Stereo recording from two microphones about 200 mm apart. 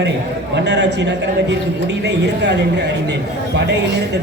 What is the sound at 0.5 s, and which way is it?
A man's voice, 60° right (ahead or behind).